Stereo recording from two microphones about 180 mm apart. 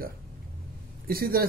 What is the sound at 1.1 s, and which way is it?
Speech, 55° right (ahead or behind).